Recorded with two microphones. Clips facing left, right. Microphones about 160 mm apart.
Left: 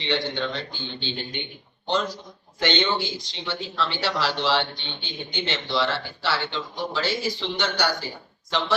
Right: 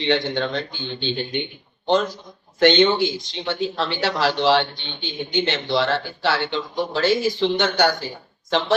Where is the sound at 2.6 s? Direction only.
55° right (ahead or behind).